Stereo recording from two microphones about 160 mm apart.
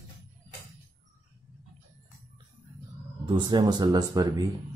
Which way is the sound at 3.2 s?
30° right (ahead or behind).